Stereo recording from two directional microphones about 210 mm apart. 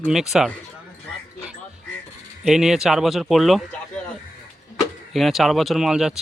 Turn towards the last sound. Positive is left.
turn(degrees=0)  # may be behind; listen again after turning